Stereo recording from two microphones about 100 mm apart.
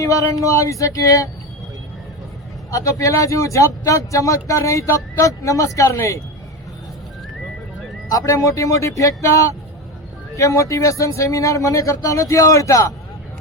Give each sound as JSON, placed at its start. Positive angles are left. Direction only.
{"t": 0.0, "sound": "speech", "side_deg": 35}
{"t": 2.7, "sound": "speech", "side_deg": 30}
{"t": 8.1, "sound": "speech", "side_deg": 30}